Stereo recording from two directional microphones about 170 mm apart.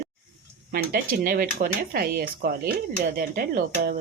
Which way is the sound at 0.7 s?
55° right (ahead or behind).